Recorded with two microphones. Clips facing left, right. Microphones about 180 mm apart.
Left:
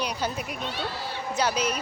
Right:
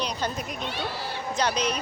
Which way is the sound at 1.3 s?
5° left (ahead or behind).